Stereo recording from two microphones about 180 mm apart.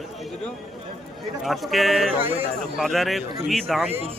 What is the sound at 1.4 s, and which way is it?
Speech, centre (ahead or behind).